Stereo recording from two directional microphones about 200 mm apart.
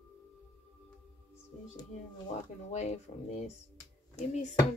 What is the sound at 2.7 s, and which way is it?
Speech, 35° left (ahead or behind).